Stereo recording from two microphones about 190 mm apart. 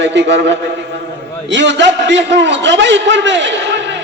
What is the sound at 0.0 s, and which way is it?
Music, 70° right (ahead or behind).